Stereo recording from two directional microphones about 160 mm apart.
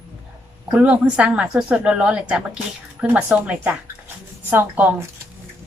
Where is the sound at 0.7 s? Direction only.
10° right (ahead or behind).